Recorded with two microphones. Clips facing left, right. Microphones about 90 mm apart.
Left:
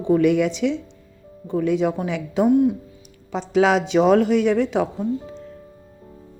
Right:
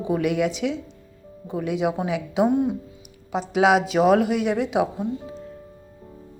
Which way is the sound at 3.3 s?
10° right (ahead or behind).